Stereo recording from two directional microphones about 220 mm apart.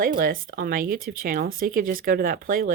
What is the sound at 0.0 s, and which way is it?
Speech, 40° right (ahead or behind).